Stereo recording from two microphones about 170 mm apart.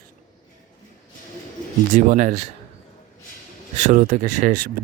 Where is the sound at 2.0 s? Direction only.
50° right (ahead or behind).